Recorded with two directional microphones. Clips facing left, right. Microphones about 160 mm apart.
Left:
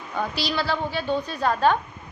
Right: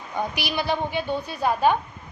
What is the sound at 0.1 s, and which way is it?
A woman's voice, 15° right (ahead or behind).